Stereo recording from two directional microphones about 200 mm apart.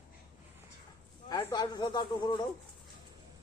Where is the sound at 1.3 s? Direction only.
20° left (ahead or behind).